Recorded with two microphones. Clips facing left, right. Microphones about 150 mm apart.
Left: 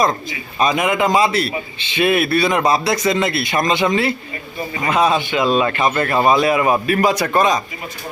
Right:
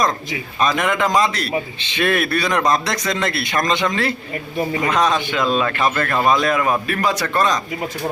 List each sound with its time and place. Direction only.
0.6 s a man's voice: 5° left (ahead or behind)
5.9 s speech: 20° left (ahead or behind)
6.2 s speech: 5° left (ahead or behind)